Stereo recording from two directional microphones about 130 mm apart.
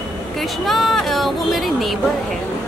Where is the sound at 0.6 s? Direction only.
Centre (ahead or behind).